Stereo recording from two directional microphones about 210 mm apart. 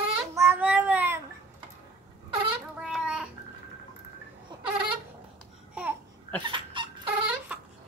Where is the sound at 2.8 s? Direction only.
5° right (ahead or behind).